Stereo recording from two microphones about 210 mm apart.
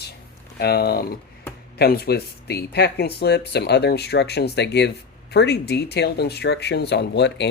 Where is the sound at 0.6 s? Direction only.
50° left (ahead or behind).